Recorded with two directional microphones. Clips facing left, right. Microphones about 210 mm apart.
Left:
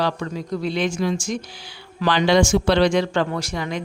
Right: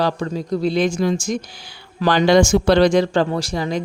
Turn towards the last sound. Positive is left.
turn(degrees=-35)  # may be behind; listen again after turning